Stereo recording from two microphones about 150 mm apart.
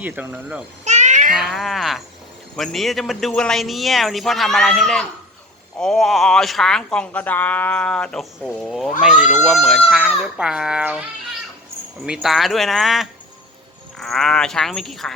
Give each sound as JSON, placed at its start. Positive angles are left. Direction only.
{"t": 0.0, "sound": "speech", "side_deg": -10}
{"t": 0.9, "sound": "cat", "side_deg": -50}
{"t": 1.3, "sound": "speech", "side_deg": 0}